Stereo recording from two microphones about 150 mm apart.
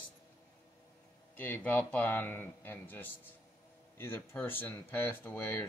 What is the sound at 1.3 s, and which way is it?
Speech, 10° left (ahead or behind).